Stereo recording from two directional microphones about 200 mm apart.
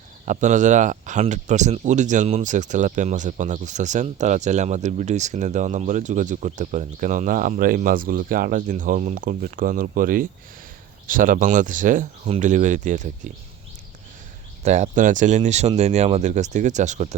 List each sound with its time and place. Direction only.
0.3 s speech: 40° right (ahead or behind)
14.6 s speech: 35° right (ahead or behind)